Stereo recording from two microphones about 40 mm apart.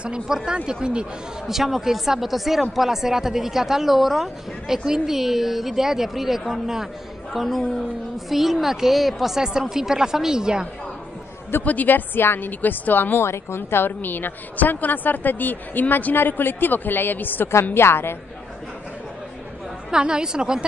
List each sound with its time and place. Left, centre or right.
0.3 s a woman's voice: centre
1.5 s a woman's voice: centre
9.4 s a woman's voice: centre
11.6 s a woman's voice: left
12.2 s a woman's voice: left
12.4 s a woman's voice: left
13.2 s a woman's voice: left
17.7 s a woman's voice: left
19.9 s a woman's voice: centre